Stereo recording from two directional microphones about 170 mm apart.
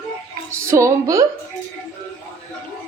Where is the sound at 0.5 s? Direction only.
15° right (ahead or behind).